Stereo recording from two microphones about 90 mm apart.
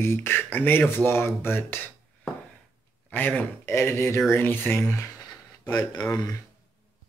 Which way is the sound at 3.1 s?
15° left (ahead or behind).